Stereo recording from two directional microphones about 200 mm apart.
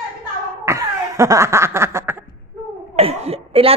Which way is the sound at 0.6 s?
15° right (ahead or behind).